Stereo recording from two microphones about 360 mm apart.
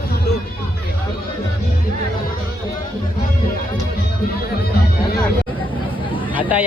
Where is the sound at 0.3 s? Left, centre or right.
Left.